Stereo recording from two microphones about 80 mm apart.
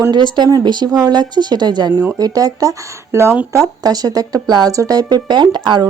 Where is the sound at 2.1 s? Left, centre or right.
Right.